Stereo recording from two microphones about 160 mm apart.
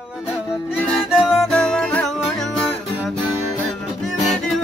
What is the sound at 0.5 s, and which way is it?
Music, 10° left (ahead or behind).